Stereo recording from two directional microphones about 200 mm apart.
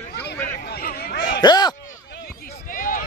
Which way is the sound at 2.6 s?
40° left (ahead or behind).